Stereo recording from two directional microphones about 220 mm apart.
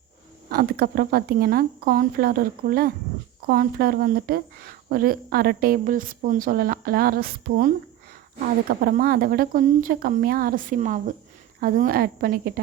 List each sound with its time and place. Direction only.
0.5 s a woman's voice: 45° right (ahead or behind)
8.7 s a woman's voice: 40° right (ahead or behind)